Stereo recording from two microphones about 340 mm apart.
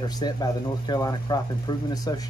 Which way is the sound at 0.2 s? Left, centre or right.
Centre.